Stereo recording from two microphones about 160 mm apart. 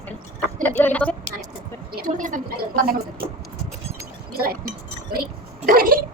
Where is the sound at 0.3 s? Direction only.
10° left (ahead or behind).